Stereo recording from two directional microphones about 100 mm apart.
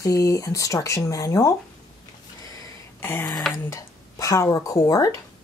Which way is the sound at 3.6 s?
30° left (ahead or behind).